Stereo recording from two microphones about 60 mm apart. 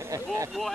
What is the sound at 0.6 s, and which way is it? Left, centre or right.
Speech, centre.